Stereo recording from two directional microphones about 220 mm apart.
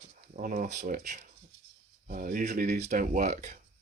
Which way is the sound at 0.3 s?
40° right (ahead or behind).